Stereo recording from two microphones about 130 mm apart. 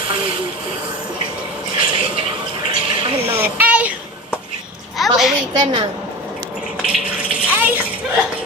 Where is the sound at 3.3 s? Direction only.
15° right (ahead or behind).